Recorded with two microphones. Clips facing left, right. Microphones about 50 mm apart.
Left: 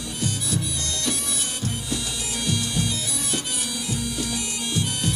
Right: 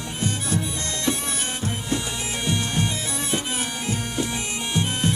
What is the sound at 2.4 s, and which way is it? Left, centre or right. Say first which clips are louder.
Music: right 1 dB; right.